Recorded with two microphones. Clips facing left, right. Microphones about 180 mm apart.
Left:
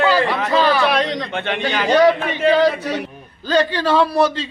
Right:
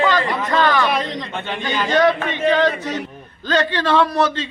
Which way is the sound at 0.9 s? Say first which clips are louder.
Left 3 dB; 75° left (ahead or behind).